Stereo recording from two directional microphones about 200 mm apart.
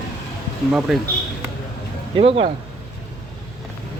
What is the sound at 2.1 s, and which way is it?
Speech, 25° right (ahead or behind).